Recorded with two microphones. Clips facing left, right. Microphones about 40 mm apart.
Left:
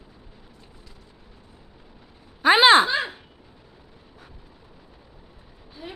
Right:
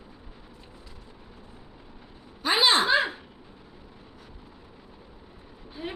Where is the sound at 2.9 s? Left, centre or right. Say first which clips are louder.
Right 3 dB; centre.